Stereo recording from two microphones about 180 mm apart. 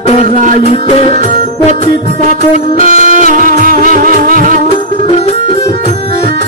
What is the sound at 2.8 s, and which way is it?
Music, 45° right (ahead or behind).